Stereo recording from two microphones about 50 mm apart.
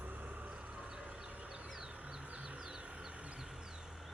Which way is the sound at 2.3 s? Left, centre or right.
Right.